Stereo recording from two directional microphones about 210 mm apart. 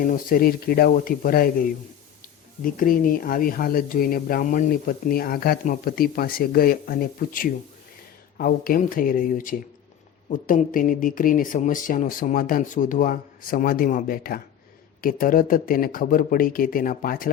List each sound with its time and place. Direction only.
0.0 s speech: 40° left (ahead or behind)
2.7 s speech: 40° left (ahead or behind)